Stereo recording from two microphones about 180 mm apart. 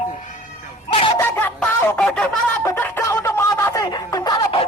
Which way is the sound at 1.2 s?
10° left (ahead or behind).